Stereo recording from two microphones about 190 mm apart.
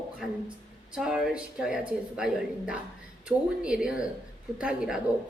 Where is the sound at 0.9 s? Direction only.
5° right (ahead or behind).